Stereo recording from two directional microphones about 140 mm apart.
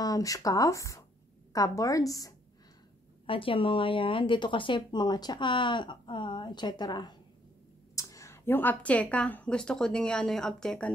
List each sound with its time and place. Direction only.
0.0 s speech: 25° left (ahead or behind)
3.3 s a woman's voice: 40° left (ahead or behind); by 10.9 s 5° left (ahead or behind)